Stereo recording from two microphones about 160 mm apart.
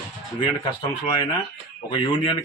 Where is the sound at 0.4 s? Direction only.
30° left (ahead or behind).